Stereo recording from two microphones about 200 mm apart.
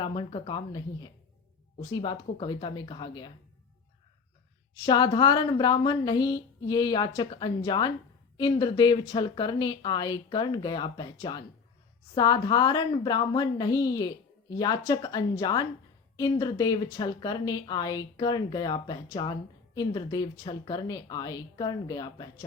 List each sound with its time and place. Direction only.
0.0 s a woman's voice: 25° left (ahead or behind)
4.9 s a woman's voice: 20° left (ahead or behind)